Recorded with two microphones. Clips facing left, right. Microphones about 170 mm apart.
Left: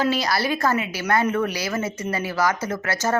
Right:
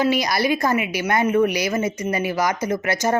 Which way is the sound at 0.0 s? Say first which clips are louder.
Right 2 dB; 15° right (ahead or behind).